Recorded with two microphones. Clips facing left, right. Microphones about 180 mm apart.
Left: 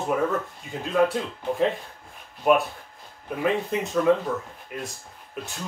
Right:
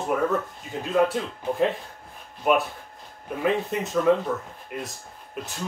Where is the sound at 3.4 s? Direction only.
Centre (ahead or behind).